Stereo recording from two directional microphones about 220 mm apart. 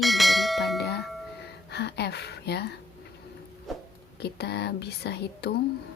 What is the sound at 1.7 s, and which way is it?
Speech, 50° left (ahead or behind).